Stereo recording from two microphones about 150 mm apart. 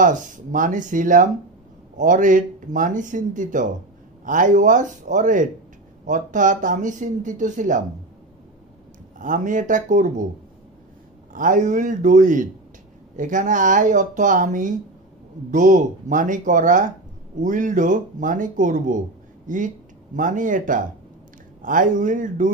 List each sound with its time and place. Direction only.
0.0 s speech: 60° right (ahead or behind)
9.2 s speech: 60° right (ahead or behind)
11.3 s speech: 60° right (ahead or behind)